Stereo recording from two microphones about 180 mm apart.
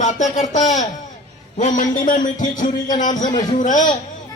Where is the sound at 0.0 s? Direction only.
45° left (ahead or behind).